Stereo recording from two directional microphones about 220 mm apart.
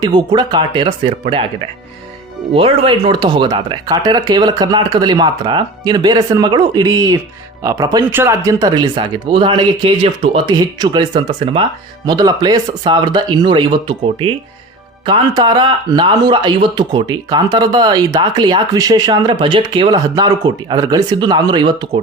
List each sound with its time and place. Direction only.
0.0 s speech: 20° right (ahead or behind)
2.5 s speech: 25° right (ahead or behind)